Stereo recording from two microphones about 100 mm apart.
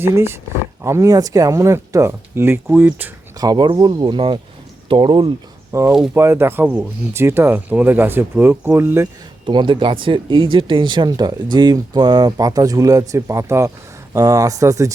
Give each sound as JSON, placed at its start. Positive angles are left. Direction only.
{"t": 0.0, "sound": "speech", "side_deg": -25}
{"t": 3.4, "sound": "speech", "side_deg": -45}
{"t": 5.7, "sound": "speech", "side_deg": -30}
{"t": 9.5, "sound": "speech", "side_deg": -50}